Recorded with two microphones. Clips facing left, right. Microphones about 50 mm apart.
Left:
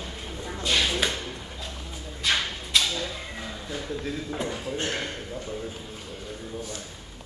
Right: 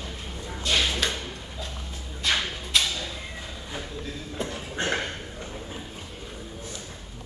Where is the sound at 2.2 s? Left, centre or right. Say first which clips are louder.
Even; centre.